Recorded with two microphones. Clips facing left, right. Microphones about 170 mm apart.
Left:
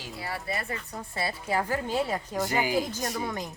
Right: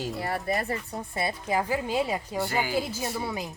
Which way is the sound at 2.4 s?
15° left (ahead or behind).